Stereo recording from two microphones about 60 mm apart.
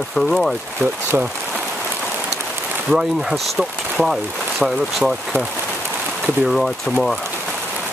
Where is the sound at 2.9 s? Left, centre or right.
Centre.